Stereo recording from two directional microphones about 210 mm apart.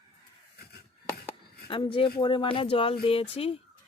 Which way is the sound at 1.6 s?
25° left (ahead or behind).